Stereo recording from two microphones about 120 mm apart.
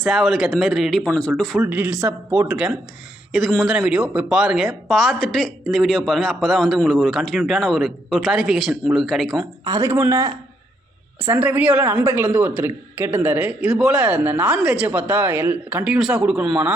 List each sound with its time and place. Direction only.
0.0 s speech: centre (ahead or behind)
1.6 s a woman's voice: 20° right (ahead or behind); by 9.5 s centre (ahead or behind)
9.6 s a woman's voice: 25° right (ahead or behind); by 16.7 s 5° right (ahead or behind)